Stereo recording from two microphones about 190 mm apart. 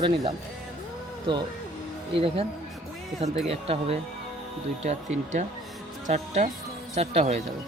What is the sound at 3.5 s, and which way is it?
Speech, 30° right (ahead or behind).